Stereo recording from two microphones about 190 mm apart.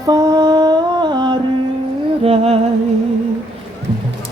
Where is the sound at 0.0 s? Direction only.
20° right (ahead or behind).